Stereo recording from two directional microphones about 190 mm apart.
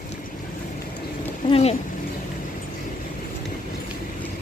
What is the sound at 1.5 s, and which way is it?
Speech, 30° left (ahead or behind).